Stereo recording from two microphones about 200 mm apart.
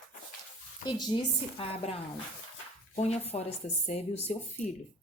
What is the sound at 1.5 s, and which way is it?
A woman's voice, 30° left (ahead or behind).